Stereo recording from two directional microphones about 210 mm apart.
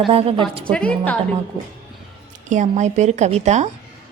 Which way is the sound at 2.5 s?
35° right (ahead or behind).